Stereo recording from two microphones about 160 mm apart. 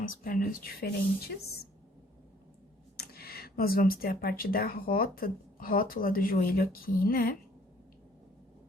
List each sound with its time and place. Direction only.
0.0 s speech: 60° left (ahead or behind)
3.0 s speech: 75° left (ahead or behind)